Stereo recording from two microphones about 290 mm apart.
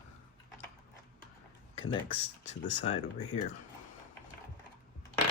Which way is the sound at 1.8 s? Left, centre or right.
Left.